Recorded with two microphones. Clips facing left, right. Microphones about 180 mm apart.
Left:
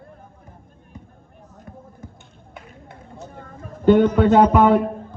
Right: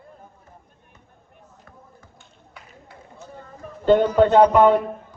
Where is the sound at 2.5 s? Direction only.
25° left (ahead or behind).